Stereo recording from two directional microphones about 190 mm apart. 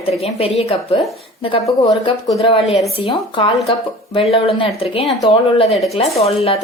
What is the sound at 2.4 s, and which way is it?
A woman's voice, 30° left (ahead or behind).